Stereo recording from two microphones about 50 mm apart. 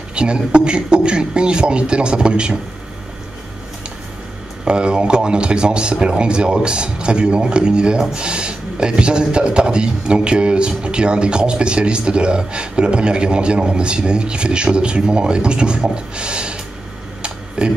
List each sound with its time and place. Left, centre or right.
0.1 s speech: centre
4.6 s speech: centre
17.2 s a sound: centre